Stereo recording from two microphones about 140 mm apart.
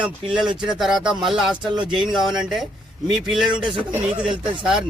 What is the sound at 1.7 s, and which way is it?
Speech, 35° right (ahead or behind).